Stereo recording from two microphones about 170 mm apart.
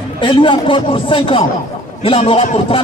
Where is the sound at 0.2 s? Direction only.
30° left (ahead or behind).